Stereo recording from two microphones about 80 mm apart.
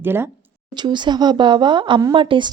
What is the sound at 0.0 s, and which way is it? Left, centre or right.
Speech, right.